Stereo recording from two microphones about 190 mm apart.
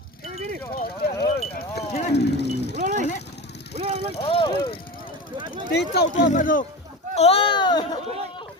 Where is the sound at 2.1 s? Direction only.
60° left (ahead or behind).